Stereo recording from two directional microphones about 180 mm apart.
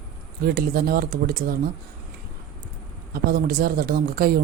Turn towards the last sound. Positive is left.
turn(degrees=-55)  # may be behind; listen again after turning